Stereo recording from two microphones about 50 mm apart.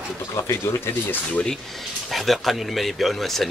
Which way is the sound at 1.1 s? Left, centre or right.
Left.